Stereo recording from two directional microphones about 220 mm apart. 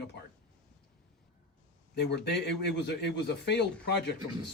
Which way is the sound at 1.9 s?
50° left (ahead or behind).